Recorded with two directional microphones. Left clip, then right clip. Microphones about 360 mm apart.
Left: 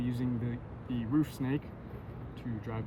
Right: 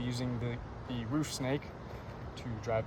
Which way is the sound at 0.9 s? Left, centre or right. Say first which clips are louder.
Left 4 dB; centre.